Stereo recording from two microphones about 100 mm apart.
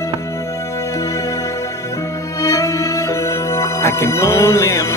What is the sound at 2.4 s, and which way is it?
Music, 30° left (ahead or behind).